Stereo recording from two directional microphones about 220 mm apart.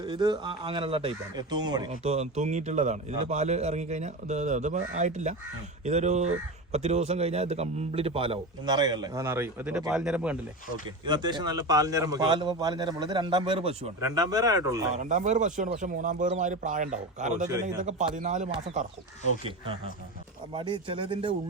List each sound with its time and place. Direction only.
0.0 s a man's voice: 20° right (ahead or behind)
1.9 s a man's voice: 30° right (ahead or behind); by 10.3 s 5° right (ahead or behind)
11.0 s a man's voice: 20° right (ahead or behind)
14.9 s a man's voice: 35° right (ahead or behind)